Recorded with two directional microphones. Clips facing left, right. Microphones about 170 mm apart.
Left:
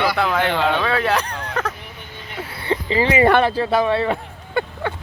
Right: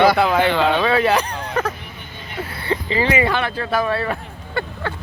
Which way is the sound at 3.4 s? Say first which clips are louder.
Left 4 dB; 30° left (ahead or behind).